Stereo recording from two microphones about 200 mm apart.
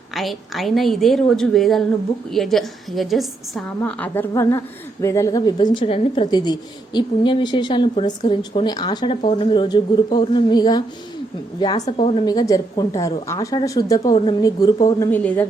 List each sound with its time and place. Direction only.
0.1 s a woman's voice: centre (ahead or behind)